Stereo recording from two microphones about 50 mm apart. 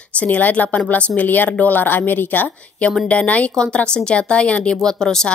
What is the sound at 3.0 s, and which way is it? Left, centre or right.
Speech, left.